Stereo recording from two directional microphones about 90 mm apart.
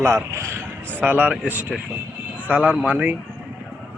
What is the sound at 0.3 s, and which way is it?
Speech, 30° right (ahead or behind).